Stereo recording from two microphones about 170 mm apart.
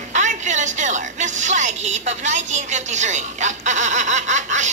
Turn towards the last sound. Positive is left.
turn(degrees=-45)  # may be behind; listen again after turning